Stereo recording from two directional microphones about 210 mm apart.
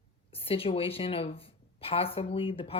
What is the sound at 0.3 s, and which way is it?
A woman's voice, 25° left (ahead or behind).